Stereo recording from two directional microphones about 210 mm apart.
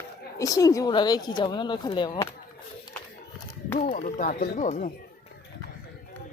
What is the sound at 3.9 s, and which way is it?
Speech, 35° left (ahead or behind).